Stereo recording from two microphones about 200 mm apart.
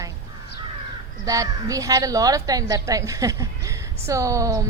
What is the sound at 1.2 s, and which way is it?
A woman's voice, 15° right (ahead or behind).